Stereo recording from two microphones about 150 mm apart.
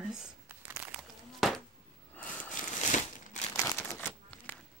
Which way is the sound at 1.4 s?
Centre (ahead or behind).